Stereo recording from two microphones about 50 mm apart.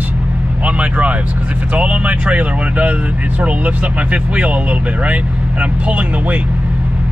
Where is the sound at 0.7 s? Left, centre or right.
Right.